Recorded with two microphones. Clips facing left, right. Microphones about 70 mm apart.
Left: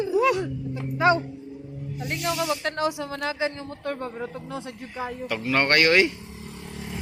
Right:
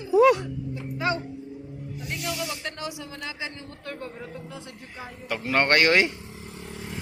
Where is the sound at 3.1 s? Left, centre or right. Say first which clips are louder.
Left 8 dB; left.